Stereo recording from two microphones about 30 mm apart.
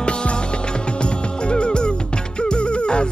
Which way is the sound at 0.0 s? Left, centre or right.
Left.